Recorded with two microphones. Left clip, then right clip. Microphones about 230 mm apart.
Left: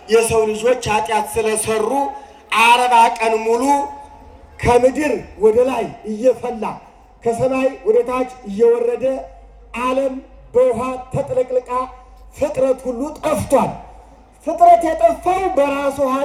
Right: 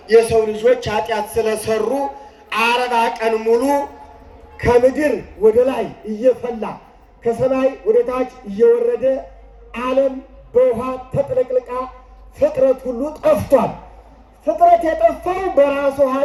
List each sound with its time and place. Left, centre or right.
0.1 s a man's voice: left